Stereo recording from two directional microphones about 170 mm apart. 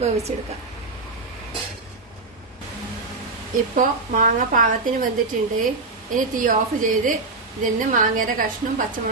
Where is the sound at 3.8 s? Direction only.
55° right (ahead or behind).